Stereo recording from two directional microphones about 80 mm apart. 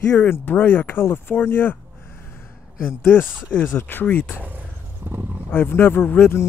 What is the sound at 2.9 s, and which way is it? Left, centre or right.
Speech, left.